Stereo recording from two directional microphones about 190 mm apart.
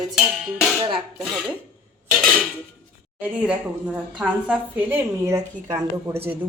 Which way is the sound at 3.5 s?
5° right (ahead or behind).